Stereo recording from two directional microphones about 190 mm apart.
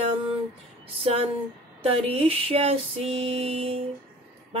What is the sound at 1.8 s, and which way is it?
A woman's voice, 30° right (ahead or behind).